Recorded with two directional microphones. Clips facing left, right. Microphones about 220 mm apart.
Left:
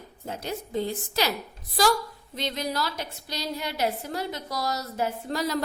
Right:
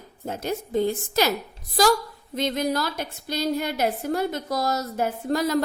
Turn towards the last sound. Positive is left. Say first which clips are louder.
# right 5 dB
turn(degrees=-50)  # may be behind; listen again after turning